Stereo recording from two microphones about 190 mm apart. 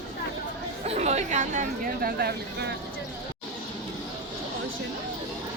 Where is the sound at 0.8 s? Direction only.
35° right (ahead or behind); by 2.7 s 55° right (ahead or behind).